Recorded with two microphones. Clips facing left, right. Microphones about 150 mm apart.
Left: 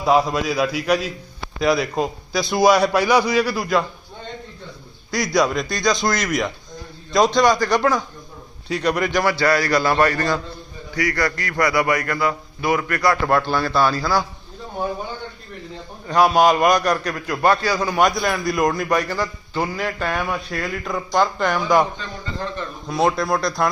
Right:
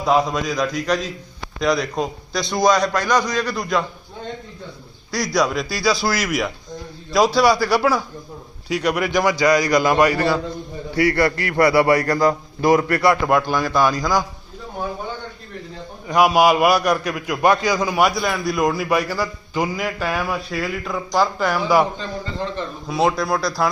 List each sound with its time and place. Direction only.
0.0 s a man's voice: 5° left (ahead or behind)
5.1 s a man's voice: centre (ahead or behind)
10.9 s a man's voice: 30° right (ahead or behind)
13.2 s a man's voice: 15° right (ahead or behind)
16.0 s a man's voice: 10° right (ahead or behind)
22.9 s a man's voice: centre (ahead or behind)